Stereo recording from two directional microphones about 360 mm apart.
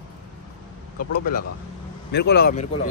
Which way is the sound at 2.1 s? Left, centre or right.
Left.